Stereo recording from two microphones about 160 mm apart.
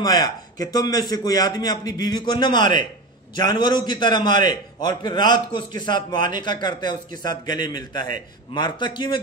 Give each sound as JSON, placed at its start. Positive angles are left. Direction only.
{"t": 0.0, "sound": "a man's voice", "side_deg": 25}